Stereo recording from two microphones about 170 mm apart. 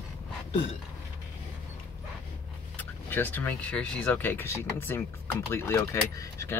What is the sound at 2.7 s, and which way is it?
Speech, 10° left (ahead or behind).